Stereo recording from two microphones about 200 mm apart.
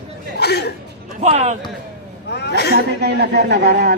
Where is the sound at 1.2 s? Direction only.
35° right (ahead or behind).